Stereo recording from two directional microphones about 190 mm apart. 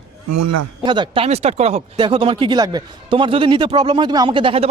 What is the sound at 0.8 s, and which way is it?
Speech, 25° right (ahead or behind).